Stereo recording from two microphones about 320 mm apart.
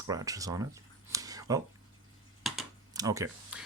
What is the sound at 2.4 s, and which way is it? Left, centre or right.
Typing, centre.